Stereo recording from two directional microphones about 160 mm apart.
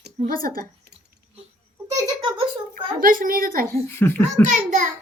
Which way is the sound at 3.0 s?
60° right (ahead or behind).